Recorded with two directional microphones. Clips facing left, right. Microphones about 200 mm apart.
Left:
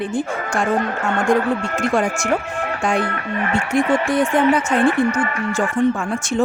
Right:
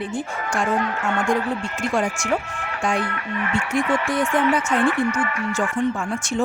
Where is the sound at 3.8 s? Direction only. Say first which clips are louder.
Left 5 dB; 35° left (ahead or behind).